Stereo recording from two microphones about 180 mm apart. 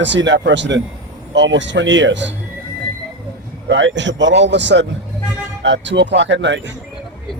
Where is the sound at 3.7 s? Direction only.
85° right.